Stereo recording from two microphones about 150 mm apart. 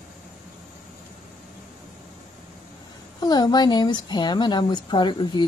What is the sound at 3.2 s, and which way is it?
A woman's voice, 25° left (ahead or behind).